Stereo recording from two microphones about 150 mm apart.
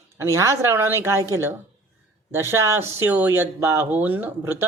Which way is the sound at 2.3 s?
15° right (ahead or behind).